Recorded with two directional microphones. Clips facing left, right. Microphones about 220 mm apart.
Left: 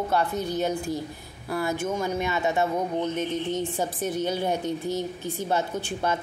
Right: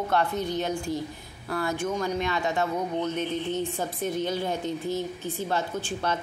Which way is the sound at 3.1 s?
50° left (ahead or behind).